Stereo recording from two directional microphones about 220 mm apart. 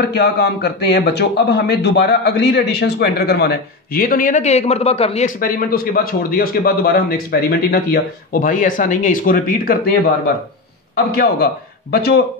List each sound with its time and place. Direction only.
0.0 s speech: 50° left (ahead or behind)
11.1 s a man's voice: 45° left (ahead or behind)